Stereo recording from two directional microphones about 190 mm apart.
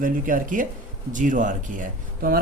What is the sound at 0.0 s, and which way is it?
Speech, 45° right (ahead or behind).